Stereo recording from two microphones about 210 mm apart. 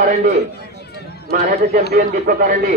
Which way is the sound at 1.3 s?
40° right (ahead or behind).